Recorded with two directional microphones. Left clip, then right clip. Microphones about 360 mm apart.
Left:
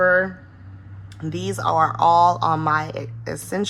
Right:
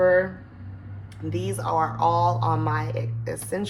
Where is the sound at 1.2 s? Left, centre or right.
Left.